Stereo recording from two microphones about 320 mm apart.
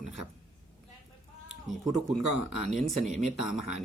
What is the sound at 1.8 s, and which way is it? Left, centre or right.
Speech, right.